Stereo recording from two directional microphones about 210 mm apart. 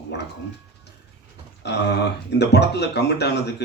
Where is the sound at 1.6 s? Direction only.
55° left (ahead or behind).